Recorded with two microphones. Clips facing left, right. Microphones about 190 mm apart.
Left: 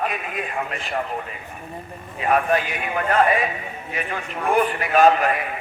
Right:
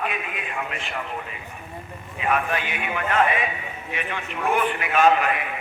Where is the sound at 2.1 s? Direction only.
40° left (ahead or behind).